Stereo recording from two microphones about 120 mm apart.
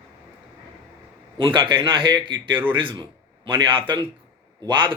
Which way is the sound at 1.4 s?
45° right (ahead or behind).